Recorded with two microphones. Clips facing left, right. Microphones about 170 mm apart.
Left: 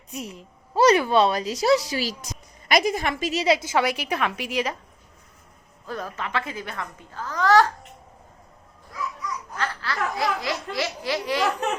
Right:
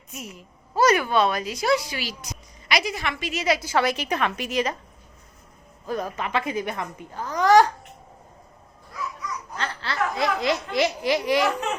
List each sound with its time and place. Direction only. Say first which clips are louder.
0.1 s a woman's voice: left 4 dB; 35° left (ahead or behind)
3.4 s a woman's voice: even; 25° left (ahead or behind); by 4.7 s 10° left (ahead or behind)
5.8 s a woman's voice: right 4 dB; 15° right (ahead or behind)
9.6 s baby laughter: right 1 dB; 25° right (ahead or behind)